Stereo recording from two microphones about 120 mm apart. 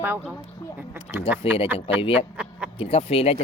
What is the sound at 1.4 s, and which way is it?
Speech, 50° left (ahead or behind).